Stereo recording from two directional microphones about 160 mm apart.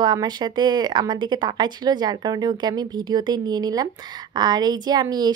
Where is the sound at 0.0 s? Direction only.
25° right (ahead or behind).